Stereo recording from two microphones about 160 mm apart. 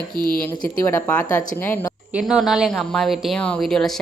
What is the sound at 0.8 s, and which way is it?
Speech, 15° left (ahead or behind).